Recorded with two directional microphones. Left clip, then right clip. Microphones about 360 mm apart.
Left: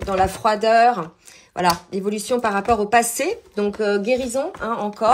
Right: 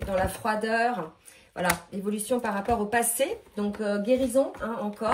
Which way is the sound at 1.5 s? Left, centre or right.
Centre.